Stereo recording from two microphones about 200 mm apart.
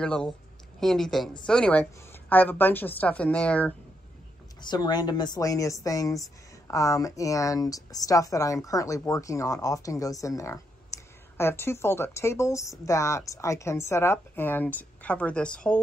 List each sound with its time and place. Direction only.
0.0 s a woman's voice: 5° left (ahead or behind)
4.6 s a woman's voice: 20° left (ahead or behind); by 15.8 s 5° left (ahead or behind)